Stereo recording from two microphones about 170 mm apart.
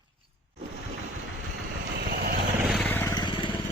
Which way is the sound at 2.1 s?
60° right (ahead or behind).